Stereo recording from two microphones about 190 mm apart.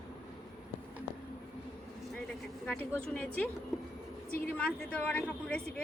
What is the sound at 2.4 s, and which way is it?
A woman's voice, 5° left (ahead or behind).